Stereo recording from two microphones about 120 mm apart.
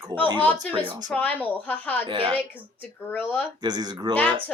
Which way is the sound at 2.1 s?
45° right (ahead or behind).